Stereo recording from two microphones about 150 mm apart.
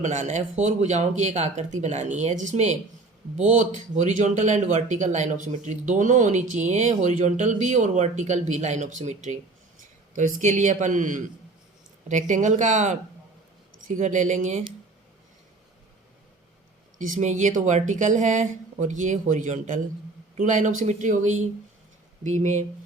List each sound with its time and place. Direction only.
0.0 s speech: 50° right (ahead or behind)
17.0 s speech: 55° right (ahead or behind)